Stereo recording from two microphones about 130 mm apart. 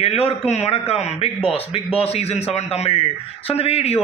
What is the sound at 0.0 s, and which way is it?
Speech, 50° left (ahead or behind).